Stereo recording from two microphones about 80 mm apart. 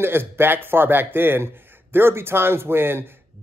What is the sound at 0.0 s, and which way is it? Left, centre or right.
Speech, right.